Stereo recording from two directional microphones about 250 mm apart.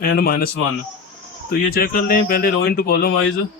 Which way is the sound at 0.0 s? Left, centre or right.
Left.